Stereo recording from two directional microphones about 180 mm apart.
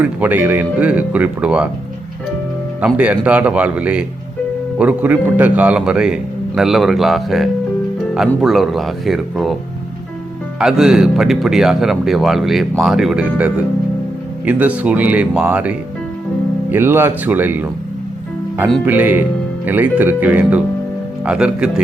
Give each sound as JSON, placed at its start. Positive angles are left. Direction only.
{"t": 0.0, "sound": "speech", "side_deg": -10}
{"t": 2.8, "sound": "speech", "side_deg": -10}
{"t": 10.6, "sound": "speech", "side_deg": -5}
{"t": 16.7, "sound": "speech", "side_deg": -15}
{"t": 18.9, "sound": "speech", "side_deg": -10}